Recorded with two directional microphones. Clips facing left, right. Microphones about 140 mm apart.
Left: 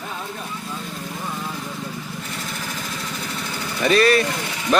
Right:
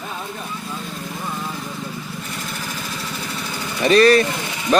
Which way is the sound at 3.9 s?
35° right (ahead or behind).